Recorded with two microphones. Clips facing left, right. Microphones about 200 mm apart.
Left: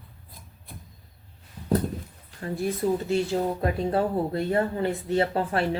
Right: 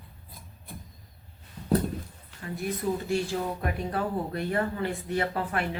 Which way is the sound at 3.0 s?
25° left (ahead or behind).